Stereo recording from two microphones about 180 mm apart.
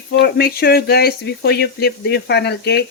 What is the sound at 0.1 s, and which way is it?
Speech, 60° left (ahead or behind).